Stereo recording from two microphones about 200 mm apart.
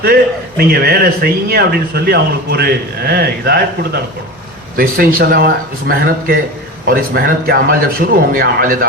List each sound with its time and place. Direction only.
0.0 s a man's voice: 50° right (ahead or behind)
4.8 s a man's voice: 45° right (ahead or behind)